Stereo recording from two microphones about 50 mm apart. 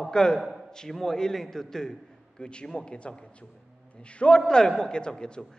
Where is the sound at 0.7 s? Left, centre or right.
Centre.